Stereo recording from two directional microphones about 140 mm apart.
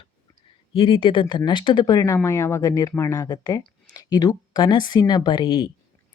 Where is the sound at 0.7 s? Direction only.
40° left (ahead or behind).